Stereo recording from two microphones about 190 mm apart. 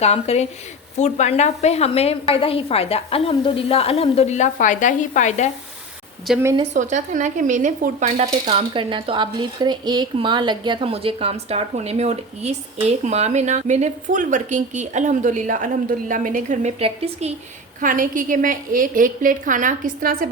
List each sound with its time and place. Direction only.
0.0 s a woman's voice: 35° left (ahead or behind)
6.3 s a woman's voice: centre (ahead or behind)
6.7 s speech: 40° right (ahead or behind)
8.4 s speech: 25° right (ahead or behind)
17.7 s a woman's voice: 45° right (ahead or behind)